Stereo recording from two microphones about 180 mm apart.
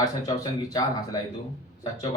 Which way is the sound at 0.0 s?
20° left (ahead or behind).